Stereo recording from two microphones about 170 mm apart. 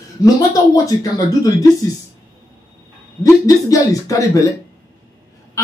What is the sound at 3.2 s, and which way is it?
A man's voice, 20° left (ahead or behind).